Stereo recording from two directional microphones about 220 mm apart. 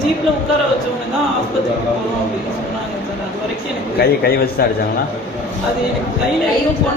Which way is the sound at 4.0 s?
45° left (ahead or behind).